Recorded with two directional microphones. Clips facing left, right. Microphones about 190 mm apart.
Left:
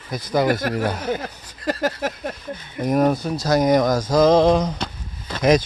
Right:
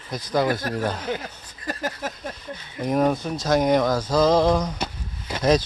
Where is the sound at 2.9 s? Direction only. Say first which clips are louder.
Left 3 dB; 10° left (ahead or behind).